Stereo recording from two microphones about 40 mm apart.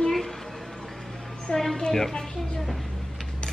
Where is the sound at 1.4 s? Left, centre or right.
Centre.